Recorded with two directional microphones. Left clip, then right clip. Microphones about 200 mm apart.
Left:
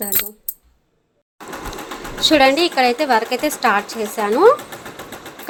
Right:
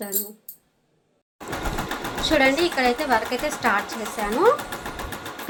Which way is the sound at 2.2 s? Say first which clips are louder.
Left 6 dB; 55° left (ahead or behind).